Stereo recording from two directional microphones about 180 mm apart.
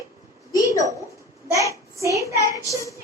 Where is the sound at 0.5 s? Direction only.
20° left (ahead or behind).